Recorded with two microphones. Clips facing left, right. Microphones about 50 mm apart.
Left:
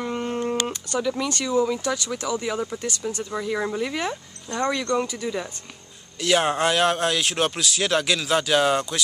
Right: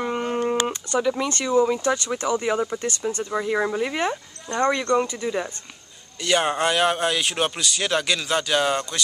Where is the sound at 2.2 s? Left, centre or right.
Right.